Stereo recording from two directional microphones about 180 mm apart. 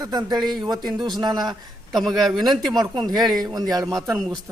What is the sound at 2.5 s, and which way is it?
Speech, 25° right (ahead or behind).